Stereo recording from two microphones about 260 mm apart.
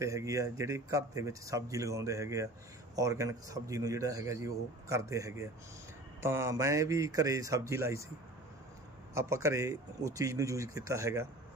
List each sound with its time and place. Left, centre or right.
0.0 s a man's voice: centre
9.1 s a man's voice: centre